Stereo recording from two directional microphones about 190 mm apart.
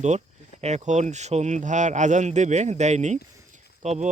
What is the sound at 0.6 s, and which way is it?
Speech, 35° right (ahead or behind).